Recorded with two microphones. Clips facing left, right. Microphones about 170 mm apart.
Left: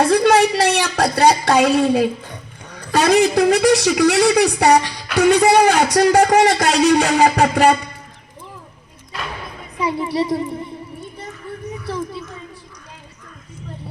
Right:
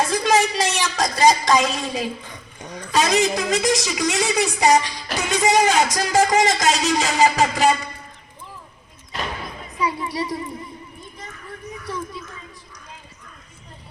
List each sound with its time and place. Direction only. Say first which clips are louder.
0.0 s a woman's voice: left 6 dB; 65° left (ahead or behind)
10.0 s a child's voice: left 7 dB; 30° left (ahead or behind)
11.9 s children playing: left 4 dB; 30° left (ahead or behind)